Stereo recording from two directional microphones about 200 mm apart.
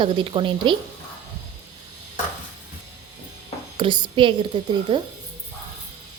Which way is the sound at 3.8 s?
25° right (ahead or behind).